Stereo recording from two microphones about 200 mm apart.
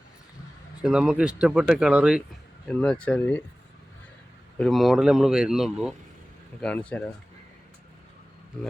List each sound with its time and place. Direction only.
0.8 s speech: 5° right (ahead or behind)
4.5 s speech: centre (ahead or behind)